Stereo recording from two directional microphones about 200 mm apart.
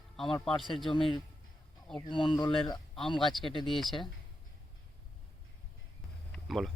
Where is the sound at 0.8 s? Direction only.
25° left (ahead or behind).